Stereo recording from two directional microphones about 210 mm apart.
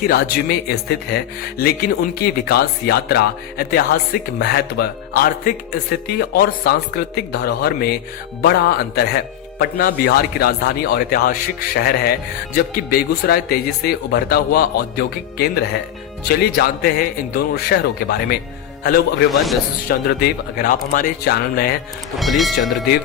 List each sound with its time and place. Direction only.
0.0 s a man's voice: 45° left (ahead or behind)
22.2 s speech: centre (ahead or behind)